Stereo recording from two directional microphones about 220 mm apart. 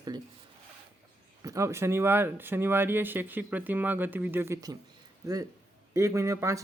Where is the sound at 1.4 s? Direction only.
15° right (ahead or behind).